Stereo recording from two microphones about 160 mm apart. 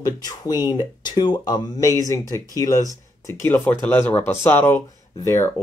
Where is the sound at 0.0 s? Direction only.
25° left (ahead or behind).